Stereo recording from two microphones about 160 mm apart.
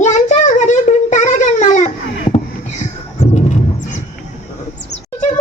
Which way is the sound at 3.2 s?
45° left (ahead or behind).